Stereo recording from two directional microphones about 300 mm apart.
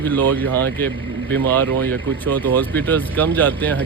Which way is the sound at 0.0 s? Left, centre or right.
Centre.